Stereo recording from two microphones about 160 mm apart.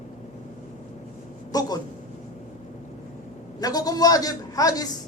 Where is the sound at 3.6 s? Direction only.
25° left (ahead or behind).